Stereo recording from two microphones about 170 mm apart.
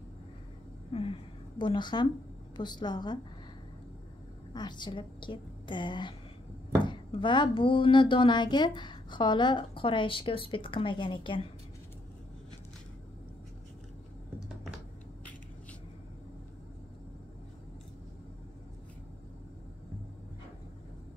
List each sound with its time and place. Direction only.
0.9 s a woman's voice: 35° left (ahead or behind)
4.6 s speech: 25° left (ahead or behind)